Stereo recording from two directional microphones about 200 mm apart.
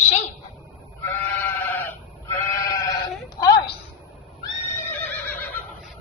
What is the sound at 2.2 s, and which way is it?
Sheep, 15° left (ahead or behind).